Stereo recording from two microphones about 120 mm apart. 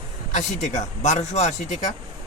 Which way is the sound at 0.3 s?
90° left.